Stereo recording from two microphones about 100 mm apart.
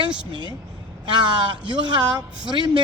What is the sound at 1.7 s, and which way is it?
A man's voice, 50° right (ahead or behind).